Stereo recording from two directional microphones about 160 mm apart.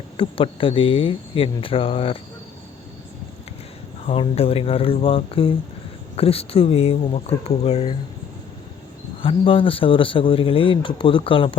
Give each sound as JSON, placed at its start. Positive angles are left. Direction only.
{"t": 0.2, "sound": "speech", "side_deg": 35}
{"t": 4.0, "sound": "speech", "side_deg": 35}
{"t": 9.2, "sound": "speech", "side_deg": 35}